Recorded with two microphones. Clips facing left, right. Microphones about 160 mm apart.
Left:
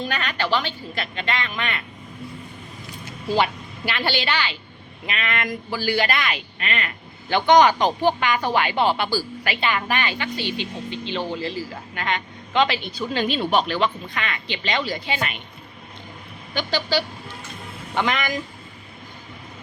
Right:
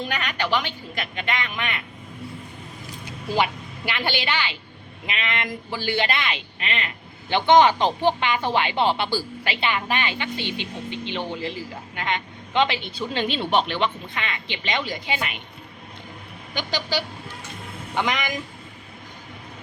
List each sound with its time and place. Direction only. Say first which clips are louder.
0.1 s a woman's voice: left 1 dB; 15° right (ahead or behind)
3.0 s a woman's voice: left 2 dB; 15° right (ahead or behind)
16.6 s a woman's voice: left 3 dB; 15° right (ahead or behind)